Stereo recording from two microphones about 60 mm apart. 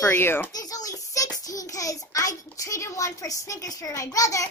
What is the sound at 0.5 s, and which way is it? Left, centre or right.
Child singing, left.